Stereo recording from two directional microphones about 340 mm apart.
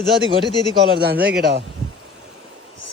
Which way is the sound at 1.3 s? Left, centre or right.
Right.